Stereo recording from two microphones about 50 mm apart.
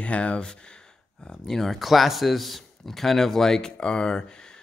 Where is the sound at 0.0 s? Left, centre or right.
Left.